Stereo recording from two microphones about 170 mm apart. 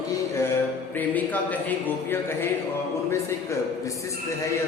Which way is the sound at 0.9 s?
10° left (ahead or behind).